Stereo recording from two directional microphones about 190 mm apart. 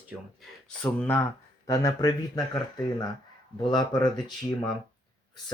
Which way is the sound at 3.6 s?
20° left (ahead or behind).